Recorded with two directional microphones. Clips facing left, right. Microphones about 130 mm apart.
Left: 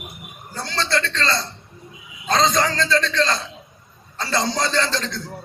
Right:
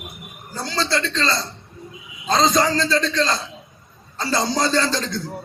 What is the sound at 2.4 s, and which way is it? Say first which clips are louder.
Speech: right 3 dB; 25° right (ahead or behind).